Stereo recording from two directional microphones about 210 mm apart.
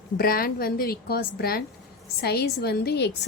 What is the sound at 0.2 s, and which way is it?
Speech, 45° left (ahead or behind).